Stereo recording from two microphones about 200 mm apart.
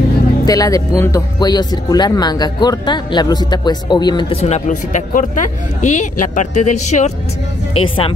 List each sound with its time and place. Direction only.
0.5 s speech: 15° left (ahead or behind)